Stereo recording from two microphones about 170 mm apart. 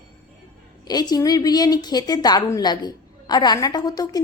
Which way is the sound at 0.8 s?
25° left (ahead or behind).